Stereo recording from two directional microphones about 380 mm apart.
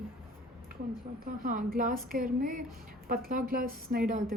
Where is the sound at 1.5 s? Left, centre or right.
Right.